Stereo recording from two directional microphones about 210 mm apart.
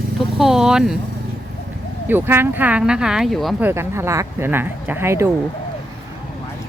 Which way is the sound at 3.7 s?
10° right (ahead or behind).